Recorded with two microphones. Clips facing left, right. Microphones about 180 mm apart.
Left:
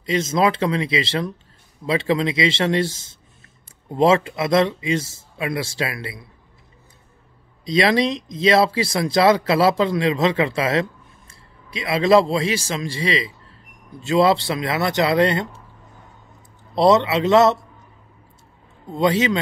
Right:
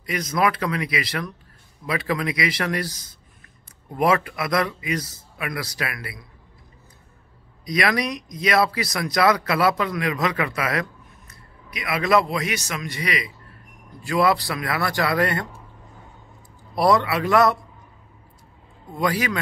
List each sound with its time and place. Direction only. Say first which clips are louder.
0.0 s speech: left 4 dB; 25° left (ahead or behind)
7.6 s speech: left 5 dB; 25° left (ahead or behind)
16.7 s speech: left 4 dB; 25° left (ahead or behind)
18.9 s speech: left 5 dB; 25° left (ahead or behind)